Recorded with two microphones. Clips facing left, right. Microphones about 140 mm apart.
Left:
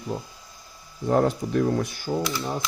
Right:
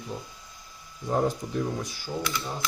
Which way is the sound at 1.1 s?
70° left (ahead or behind).